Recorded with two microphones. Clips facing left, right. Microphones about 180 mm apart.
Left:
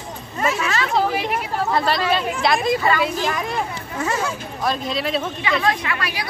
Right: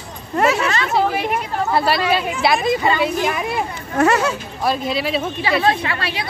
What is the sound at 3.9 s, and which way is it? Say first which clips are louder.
Speech: right 8 dB; 70° right (ahead or behind).